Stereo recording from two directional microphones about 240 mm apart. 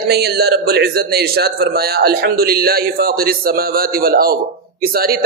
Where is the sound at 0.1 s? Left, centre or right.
Right.